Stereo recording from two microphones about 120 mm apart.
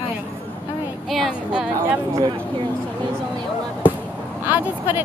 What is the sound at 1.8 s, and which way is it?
Speech, 30° right (ahead or behind).